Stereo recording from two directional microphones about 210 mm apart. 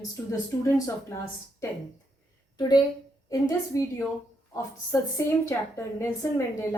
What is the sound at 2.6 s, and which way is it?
A woman's voice, 20° left (ahead or behind).